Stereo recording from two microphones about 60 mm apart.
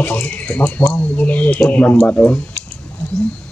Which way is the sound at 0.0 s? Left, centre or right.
Left.